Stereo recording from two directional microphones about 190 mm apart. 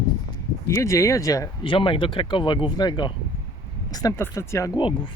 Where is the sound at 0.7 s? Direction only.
15° left (ahead or behind).